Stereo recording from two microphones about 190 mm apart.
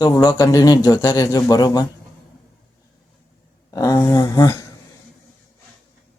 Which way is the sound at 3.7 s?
20° left (ahead or behind).